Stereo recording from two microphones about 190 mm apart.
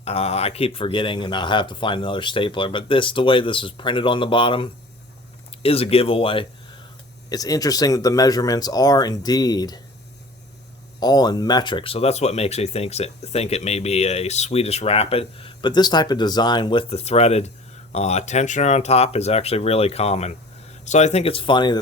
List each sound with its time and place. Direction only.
0.0 s speech: 30° left (ahead or behind)
11.0 s speech: 20° left (ahead or behind)